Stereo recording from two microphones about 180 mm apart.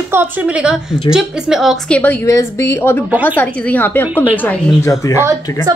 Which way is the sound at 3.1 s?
10° right (ahead or behind).